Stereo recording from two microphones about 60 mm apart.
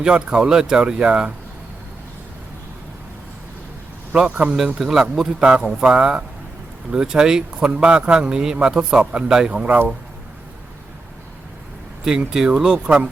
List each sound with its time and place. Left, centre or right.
0.0 s speech: centre
4.1 s a man's voice: centre
9.6 s speech: right
12.3 s speech: centre